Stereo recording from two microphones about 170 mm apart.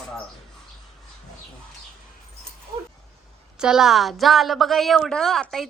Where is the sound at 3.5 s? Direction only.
5° right (ahead or behind).